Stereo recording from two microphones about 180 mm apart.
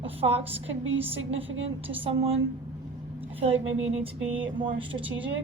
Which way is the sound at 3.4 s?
35° right (ahead or behind).